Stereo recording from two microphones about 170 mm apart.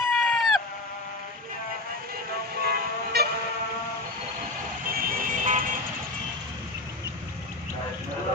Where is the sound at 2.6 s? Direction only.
65° right (ahead or behind).